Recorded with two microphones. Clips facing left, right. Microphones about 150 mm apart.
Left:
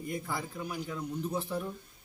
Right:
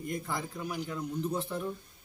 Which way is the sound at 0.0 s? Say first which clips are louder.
Right 1 dB; 5° left (ahead or behind).